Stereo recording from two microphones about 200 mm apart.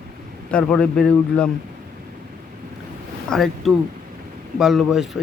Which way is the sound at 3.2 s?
Centre (ahead or behind).